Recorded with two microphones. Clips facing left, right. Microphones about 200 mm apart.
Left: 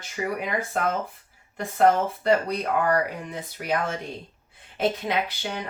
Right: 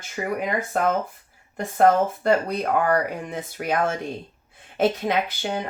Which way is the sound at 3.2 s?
50° right (ahead or behind).